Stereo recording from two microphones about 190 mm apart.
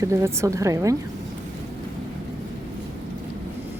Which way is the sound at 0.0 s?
15° right (ahead or behind).